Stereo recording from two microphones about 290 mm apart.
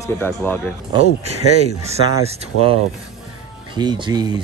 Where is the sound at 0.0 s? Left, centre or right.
Centre.